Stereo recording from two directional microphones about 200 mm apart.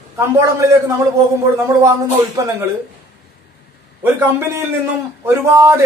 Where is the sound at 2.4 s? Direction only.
15° right (ahead or behind).